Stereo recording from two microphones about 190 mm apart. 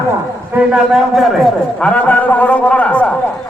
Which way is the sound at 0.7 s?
Centre (ahead or behind).